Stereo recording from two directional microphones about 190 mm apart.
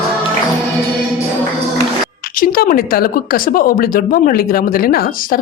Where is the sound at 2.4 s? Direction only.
50° left (ahead or behind).